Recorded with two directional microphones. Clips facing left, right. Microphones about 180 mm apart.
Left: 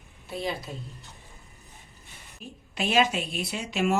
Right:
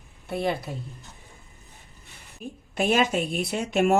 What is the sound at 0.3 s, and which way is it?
Speech, 60° right (ahead or behind).